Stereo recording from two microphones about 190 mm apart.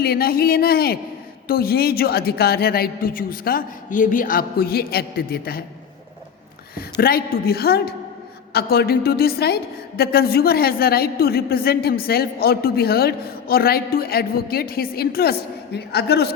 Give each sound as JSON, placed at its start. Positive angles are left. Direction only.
{"t": 0.0, "sound": "a woman's voice", "side_deg": 55}
{"t": 6.7, "sound": "a woman's voice", "side_deg": 50}